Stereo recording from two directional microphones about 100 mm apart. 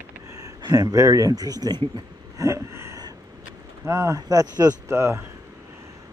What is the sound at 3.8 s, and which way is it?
Speech, 30° right (ahead or behind).